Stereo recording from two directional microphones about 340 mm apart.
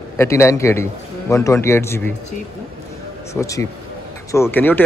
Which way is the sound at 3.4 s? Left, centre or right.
Centre.